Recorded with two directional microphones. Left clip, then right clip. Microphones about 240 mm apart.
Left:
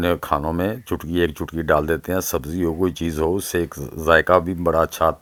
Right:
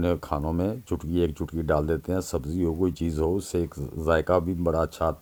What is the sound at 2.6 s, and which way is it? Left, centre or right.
Speech, left.